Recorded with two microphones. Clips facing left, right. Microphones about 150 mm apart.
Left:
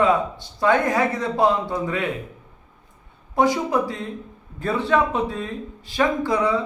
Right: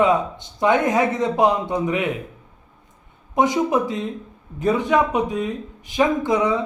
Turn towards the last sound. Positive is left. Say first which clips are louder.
# right 1 dB
turn(degrees=-20)  # may be behind; listen again after turning